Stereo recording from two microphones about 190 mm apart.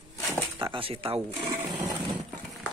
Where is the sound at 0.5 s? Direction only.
25° right (ahead or behind).